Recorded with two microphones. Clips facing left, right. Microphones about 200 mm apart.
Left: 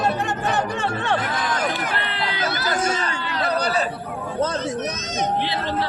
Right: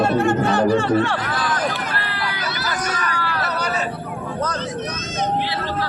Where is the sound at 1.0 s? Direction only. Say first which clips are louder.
Right 1 dB; 20° left (ahead or behind).